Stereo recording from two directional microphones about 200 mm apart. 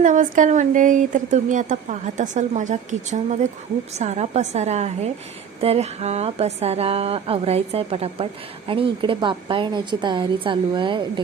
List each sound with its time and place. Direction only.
0.0 s speech: 40° right (ahead or behind); by 11.0 s 25° right (ahead or behind)